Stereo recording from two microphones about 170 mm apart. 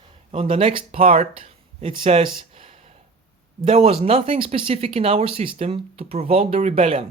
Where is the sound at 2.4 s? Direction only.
35° right (ahead or behind).